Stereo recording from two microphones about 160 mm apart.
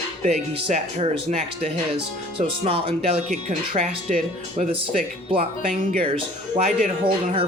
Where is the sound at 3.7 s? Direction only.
50° right (ahead or behind).